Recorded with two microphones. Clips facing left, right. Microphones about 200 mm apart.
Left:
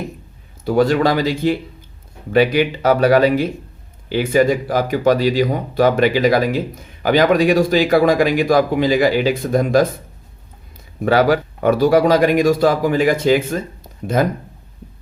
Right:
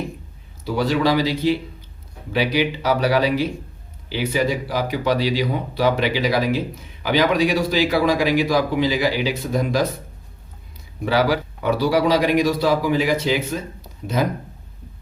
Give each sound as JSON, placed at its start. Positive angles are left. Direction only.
{"t": 0.6, "sound": "speech", "side_deg": 50}
{"t": 11.0, "sound": "speech", "side_deg": 50}